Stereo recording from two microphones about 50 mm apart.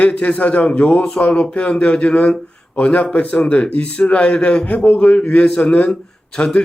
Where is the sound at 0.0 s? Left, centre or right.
Left.